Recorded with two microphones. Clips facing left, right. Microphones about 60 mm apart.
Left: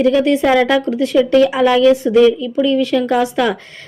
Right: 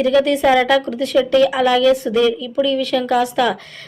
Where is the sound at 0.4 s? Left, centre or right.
Centre.